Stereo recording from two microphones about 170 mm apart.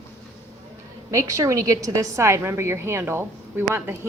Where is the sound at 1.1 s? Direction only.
20° right (ahead or behind).